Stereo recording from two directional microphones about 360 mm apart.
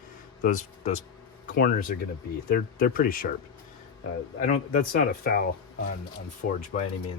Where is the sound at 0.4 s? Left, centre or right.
Left.